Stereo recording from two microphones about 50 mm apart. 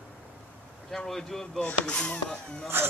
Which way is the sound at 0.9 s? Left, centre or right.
Centre.